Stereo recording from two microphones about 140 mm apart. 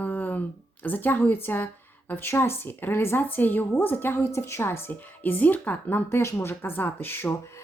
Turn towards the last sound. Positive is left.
turn(degrees=20)  # may be behind; listen again after turning